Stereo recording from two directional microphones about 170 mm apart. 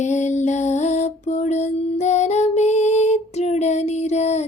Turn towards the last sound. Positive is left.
turn(degrees=40)  # may be behind; listen again after turning